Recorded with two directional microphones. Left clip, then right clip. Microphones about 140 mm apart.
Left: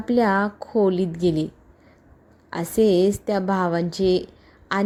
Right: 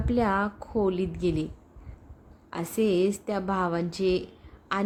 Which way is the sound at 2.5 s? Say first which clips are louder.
Left 7 dB; 30° left (ahead or behind).